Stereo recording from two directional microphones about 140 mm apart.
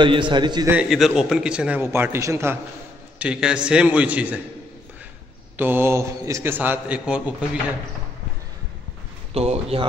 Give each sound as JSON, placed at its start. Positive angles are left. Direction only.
{"t": 0.0, "sound": "a man's voice", "side_deg": -35}
{"t": 0.8, "sound": "a man's voice", "side_deg": 0}
{"t": 3.2, "sound": "a man's voice", "side_deg": -5}
{"t": 5.6, "sound": "a man's voice", "side_deg": -15}
{"t": 9.3, "sound": "a man's voice", "side_deg": -45}